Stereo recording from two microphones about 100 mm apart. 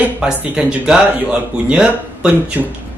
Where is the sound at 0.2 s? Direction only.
10° right (ahead or behind).